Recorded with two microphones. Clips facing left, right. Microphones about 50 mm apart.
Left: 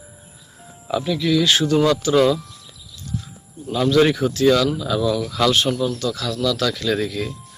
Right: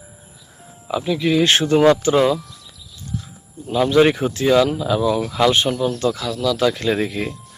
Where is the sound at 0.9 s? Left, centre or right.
Centre.